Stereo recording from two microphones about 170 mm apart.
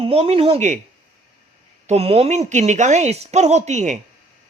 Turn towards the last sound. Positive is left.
turn(degrees=-45)  # may be behind; listen again after turning